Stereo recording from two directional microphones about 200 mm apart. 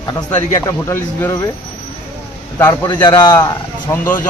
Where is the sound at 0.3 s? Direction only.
10° left (ahead or behind).